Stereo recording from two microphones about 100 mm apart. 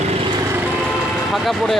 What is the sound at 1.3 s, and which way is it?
Speech, centre (ahead or behind).